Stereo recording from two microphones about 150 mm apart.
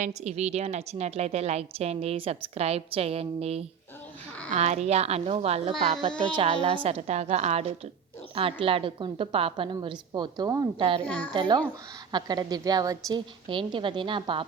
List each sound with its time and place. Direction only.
0.0 s a woman's voice: 50° right (ahead or behind); by 10.8 s 25° right (ahead or behind)
11.0 s a child's voice: 10° left (ahead or behind)
11.3 s a woman's voice: 30° right (ahead or behind)